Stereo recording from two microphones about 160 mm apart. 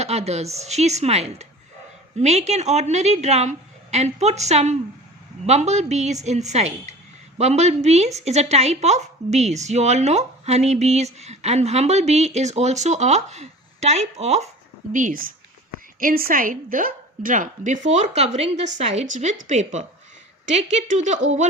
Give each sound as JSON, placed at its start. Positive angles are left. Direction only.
{"t": 0.0, "sound": "a woman's voice", "side_deg": -40}
{"t": 14.9, "sound": "a woman's voice", "side_deg": -55}